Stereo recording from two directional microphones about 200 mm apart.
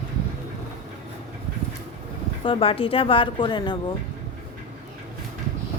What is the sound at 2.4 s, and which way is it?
Speech, 25° left (ahead or behind).